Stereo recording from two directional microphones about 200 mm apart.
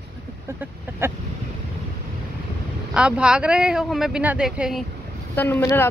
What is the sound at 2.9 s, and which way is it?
Speech, 5° right (ahead or behind).